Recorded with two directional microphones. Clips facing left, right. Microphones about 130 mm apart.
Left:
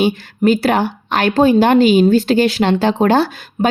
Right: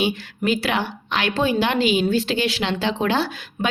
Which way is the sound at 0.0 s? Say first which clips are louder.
Left 8 dB; 45° left (ahead or behind).